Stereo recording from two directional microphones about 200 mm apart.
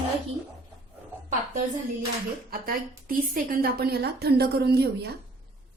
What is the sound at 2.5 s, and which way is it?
A woman's voice, 45° right (ahead or behind).